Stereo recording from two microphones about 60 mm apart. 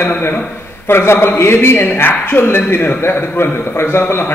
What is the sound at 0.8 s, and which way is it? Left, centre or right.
A man's voice, left.